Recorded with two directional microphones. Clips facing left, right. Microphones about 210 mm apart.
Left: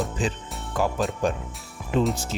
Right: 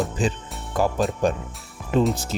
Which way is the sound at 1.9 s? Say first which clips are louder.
Right 3 dB; 40° right (ahead or behind).